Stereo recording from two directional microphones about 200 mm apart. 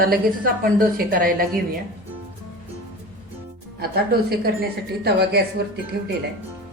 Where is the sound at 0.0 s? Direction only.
45° right (ahead or behind).